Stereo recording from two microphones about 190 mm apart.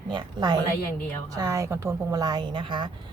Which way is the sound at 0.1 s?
25° right (ahead or behind).